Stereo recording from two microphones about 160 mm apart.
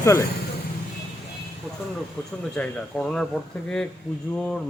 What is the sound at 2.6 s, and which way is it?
Speech, 5° left (ahead or behind).